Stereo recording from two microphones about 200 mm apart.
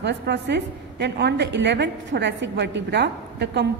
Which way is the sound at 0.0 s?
60° right (ahead or behind).